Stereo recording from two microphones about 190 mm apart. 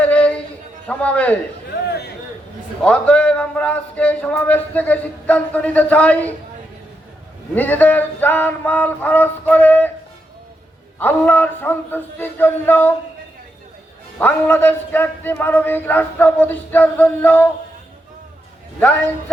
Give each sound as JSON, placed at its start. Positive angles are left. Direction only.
{"t": 0.0, "sound": "a sound", "side_deg": 5}
{"t": 0.9, "sound": "a man's voice", "side_deg": 5}
{"t": 1.9, "sound": "a sound", "side_deg": 60}
{"t": 2.8, "sound": "a man's voice", "side_deg": 5}
{"t": 7.5, "sound": "a man's voice", "side_deg": 10}
{"t": 11.0, "sound": "a man's voice", "side_deg": 10}
{"t": 14.2, "sound": "a man's voice", "side_deg": 10}